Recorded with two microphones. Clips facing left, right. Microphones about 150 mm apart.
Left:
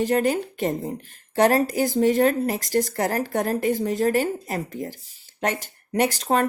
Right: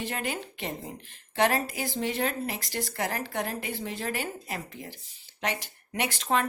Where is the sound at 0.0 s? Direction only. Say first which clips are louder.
Left 12 dB; 40° left (ahead or behind).